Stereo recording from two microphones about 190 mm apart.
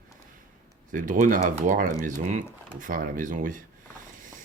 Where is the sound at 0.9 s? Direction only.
45° right (ahead or behind).